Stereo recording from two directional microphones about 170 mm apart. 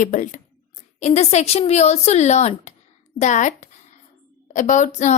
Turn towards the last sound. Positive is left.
turn(degrees=45)  # may be behind; listen again after turning